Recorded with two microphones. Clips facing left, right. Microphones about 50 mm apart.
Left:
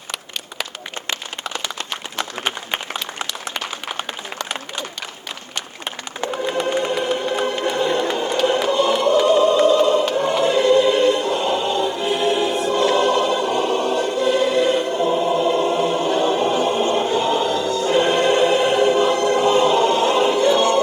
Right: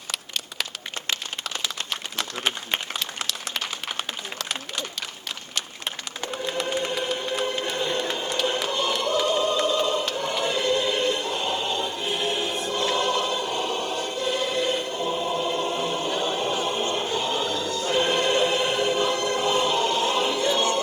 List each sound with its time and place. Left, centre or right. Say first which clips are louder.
3.2 s a sound: left 4 dB; centre
6.7 s music: left 6 dB; left
8.6 s choir: left 8 dB; left